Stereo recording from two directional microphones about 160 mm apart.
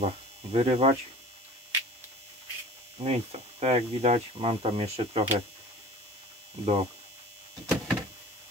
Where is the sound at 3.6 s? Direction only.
45° right (ahead or behind).